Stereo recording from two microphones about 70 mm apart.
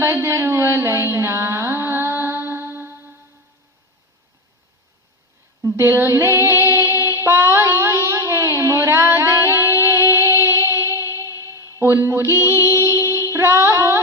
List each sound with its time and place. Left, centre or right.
0.0 s music: right
5.7 s child singing: right
11.8 s music: right